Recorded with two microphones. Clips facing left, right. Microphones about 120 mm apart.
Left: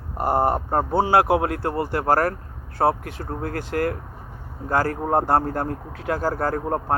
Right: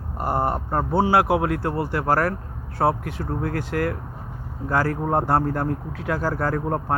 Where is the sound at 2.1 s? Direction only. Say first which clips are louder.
Left 1 dB; 45° left (ahead or behind).